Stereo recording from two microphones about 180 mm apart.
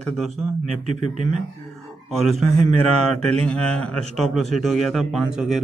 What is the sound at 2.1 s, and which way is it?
Speech, centre (ahead or behind).